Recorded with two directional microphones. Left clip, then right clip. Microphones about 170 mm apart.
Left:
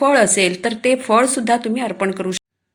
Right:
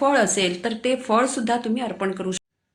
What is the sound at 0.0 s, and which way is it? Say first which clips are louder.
A woman's voice: left 5 dB; 35° left (ahead or behind).